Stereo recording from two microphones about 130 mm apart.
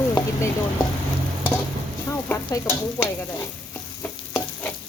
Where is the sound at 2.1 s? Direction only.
20° left (ahead or behind).